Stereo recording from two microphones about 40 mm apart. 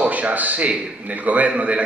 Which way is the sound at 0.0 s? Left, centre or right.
Right.